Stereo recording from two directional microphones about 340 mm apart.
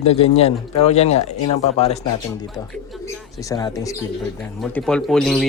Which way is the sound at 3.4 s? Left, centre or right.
Centre.